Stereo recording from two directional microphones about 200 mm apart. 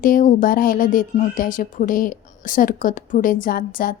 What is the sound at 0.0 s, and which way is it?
A woman's voice, 40° left (ahead or behind).